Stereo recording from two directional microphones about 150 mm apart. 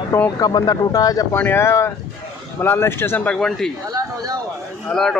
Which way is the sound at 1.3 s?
15° left (ahead or behind).